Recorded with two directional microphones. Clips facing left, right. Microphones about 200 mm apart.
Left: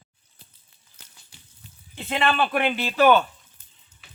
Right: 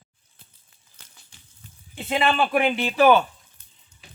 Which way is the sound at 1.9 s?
10° right (ahead or behind).